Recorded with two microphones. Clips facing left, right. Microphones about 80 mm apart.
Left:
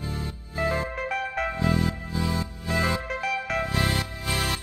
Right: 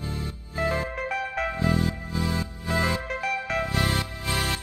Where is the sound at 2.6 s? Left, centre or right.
Right.